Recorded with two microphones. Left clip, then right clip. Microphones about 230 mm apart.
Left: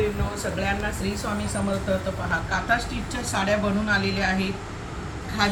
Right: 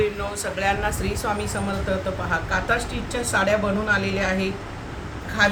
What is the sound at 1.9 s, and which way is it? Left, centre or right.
A woman's voice, right.